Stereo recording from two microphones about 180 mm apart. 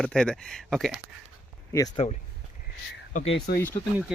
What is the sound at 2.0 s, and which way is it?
Speech, 35° left (ahead or behind).